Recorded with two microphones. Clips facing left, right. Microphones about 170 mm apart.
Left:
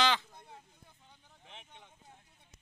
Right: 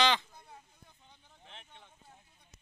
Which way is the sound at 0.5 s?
5° left (ahead or behind).